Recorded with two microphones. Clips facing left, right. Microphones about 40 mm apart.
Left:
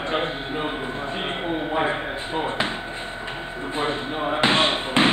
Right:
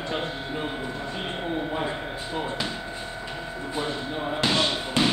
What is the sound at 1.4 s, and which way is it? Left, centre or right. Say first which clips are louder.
Speech: left 5 dB; left.